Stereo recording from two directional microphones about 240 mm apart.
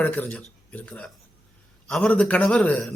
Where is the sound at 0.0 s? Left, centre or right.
Centre.